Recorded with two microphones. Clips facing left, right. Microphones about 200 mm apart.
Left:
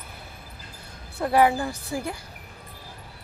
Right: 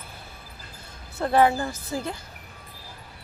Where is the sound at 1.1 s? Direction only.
10° left (ahead or behind).